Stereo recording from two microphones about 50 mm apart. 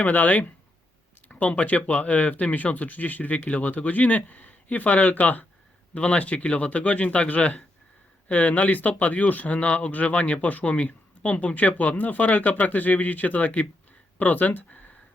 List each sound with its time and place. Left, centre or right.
0.0 s speech: left